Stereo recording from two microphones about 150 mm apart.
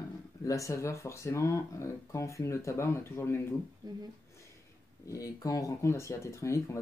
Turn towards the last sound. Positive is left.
turn(degrees=20)  # may be behind; listen again after turning